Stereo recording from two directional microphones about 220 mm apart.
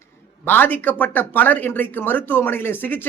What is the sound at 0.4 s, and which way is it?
Speech, 10° left (ahead or behind).